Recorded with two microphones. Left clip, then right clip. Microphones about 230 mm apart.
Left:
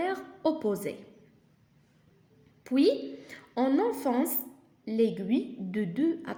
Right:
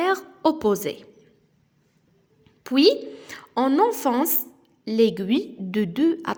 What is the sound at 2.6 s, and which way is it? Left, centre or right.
A woman's voice, right.